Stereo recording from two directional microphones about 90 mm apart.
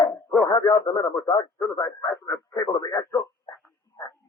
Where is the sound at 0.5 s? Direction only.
35° left (ahead or behind).